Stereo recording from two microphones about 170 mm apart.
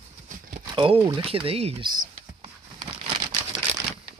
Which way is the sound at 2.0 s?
30° right (ahead or behind).